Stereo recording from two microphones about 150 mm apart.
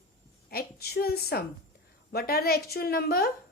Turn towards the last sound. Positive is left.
turn(degrees=90)